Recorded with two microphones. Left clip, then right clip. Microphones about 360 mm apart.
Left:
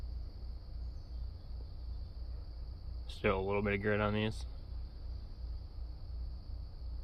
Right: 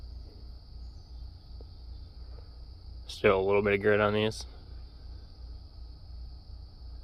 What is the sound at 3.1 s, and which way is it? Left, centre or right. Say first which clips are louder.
Speech: right 9 dB; centre.